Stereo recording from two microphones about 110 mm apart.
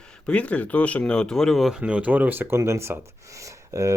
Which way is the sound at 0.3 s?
10° left (ahead or behind).